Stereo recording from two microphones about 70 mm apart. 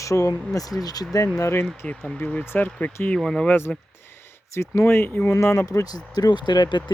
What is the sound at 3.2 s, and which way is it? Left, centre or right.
Speech, centre.